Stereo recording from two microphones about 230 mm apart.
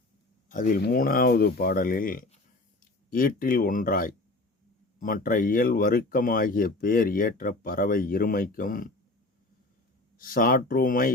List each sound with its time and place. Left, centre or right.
0.4 s speech: left
10.2 s speech: left